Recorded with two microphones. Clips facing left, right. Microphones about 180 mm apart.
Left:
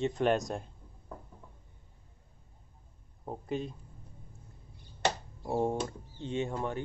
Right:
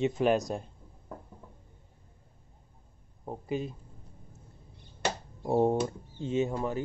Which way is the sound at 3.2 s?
5° right (ahead or behind).